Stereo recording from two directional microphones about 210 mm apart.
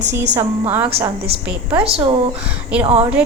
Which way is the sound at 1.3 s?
25° right (ahead or behind).